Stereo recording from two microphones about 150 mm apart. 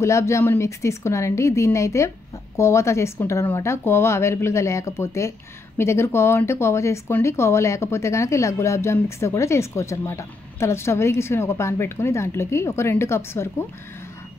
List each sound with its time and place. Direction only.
0.0 s a woman's voice: 20° left (ahead or behind)